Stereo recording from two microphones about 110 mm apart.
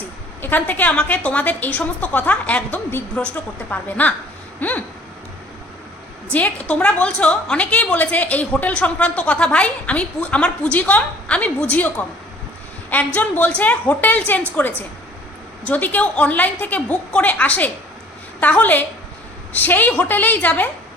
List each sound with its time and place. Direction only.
0.4 s a woman's voice: 15° left (ahead or behind)
6.3 s a woman's voice: 10° left (ahead or behind)
13.1 s a woman's voice: 15° left (ahead or behind)